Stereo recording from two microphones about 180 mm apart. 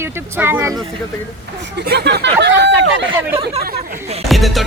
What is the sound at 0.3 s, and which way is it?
Speech, 10° right (ahead or behind).